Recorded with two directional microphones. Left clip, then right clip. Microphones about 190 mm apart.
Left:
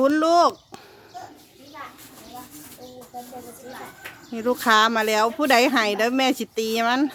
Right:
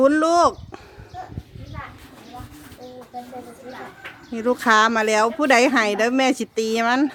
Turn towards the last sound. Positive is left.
turn(degrees=0)  # may be behind; listen again after turning